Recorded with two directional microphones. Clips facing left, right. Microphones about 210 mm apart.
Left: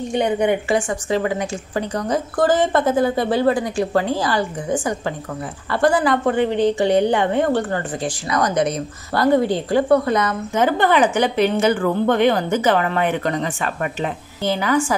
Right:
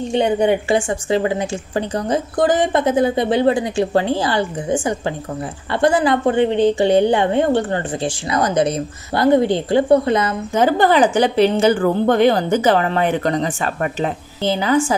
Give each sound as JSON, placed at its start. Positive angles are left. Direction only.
{"t": 0.1, "sound": "a woman's voice", "side_deg": -30}